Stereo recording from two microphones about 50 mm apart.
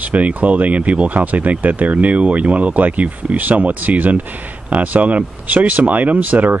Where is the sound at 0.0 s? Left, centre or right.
Right.